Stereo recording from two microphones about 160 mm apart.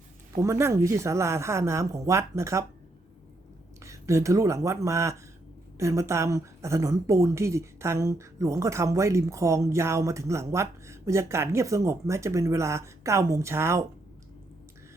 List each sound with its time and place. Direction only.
0.3 s a woman's voice: 20° right (ahead or behind)
3.8 s a woman's voice: 20° right (ahead or behind)